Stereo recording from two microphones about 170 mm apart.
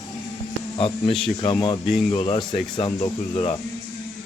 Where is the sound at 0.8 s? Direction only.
30° left (ahead or behind).